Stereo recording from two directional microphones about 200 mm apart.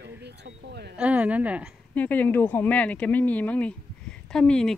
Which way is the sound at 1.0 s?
5° right (ahead or behind).